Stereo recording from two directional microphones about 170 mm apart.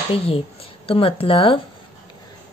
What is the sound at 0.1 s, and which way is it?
Speech, 35° left (ahead or behind).